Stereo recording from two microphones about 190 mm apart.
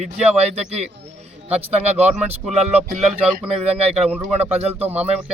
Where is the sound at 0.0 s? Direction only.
35° right (ahead or behind).